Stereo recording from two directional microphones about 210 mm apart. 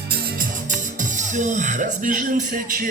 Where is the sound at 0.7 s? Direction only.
35° right (ahead or behind).